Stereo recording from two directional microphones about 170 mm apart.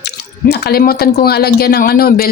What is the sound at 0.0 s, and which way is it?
Speech, 70° left (ahead or behind).